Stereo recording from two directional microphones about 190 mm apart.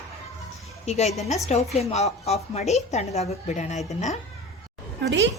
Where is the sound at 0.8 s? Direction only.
35° left (ahead or behind).